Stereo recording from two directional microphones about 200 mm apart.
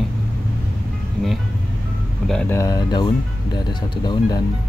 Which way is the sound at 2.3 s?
10° left (ahead or behind).